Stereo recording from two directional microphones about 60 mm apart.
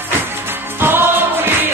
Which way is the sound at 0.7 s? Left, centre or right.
Right.